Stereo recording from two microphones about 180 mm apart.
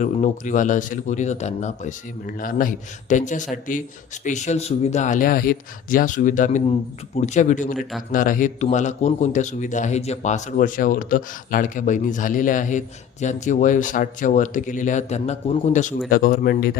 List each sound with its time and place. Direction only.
0.0 s speech: 45° left (ahead or behind)
16.0 s speech: 55° left (ahead or behind)